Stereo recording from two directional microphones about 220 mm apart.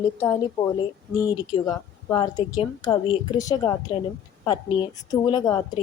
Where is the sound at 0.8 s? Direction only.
20° left (ahead or behind).